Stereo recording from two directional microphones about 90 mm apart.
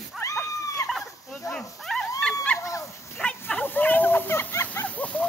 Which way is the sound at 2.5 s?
35° left (ahead or behind).